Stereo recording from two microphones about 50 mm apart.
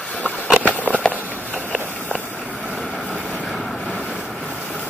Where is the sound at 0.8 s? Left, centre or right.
Left.